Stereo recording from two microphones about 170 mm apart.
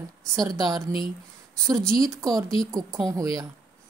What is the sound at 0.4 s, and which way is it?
Speech, 25° right (ahead or behind).